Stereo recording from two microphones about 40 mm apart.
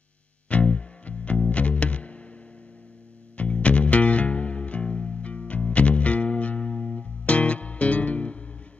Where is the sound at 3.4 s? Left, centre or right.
Left.